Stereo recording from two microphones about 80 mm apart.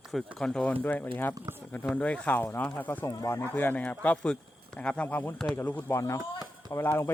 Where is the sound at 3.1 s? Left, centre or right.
Left.